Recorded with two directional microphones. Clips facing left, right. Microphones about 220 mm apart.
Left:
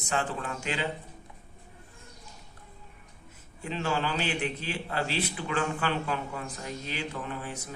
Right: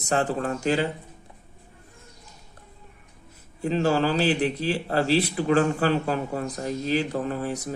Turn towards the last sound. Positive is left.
turn(degrees=-40)  # may be behind; listen again after turning